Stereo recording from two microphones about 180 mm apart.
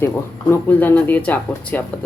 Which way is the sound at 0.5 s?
10° left (ahead or behind).